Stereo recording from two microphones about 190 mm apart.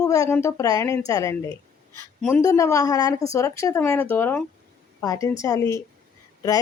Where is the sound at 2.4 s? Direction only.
15° left (ahead or behind).